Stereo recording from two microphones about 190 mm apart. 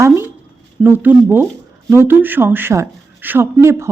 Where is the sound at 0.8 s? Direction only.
10° right (ahead or behind).